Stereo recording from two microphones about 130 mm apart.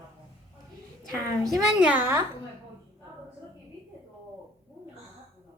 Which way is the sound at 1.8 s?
15° right (ahead or behind).